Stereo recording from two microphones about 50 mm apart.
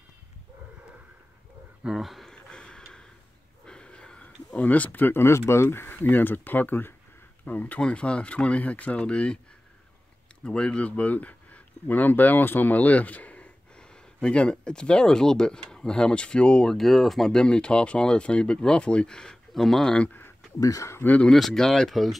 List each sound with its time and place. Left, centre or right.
1.9 s speech: centre
2.3 s a sound: centre; by 5.2 s left
5.2 s speech: left
5.9 s speech: left
7.8 s speech: left
10.4 s speech: centre
10.9 s speech: left
13.7 s speech: centre
16.7 s speech: centre
17.3 s speech: centre
19.5 s speech: centre
20.1 s a sound: left
21.3 s speech: centre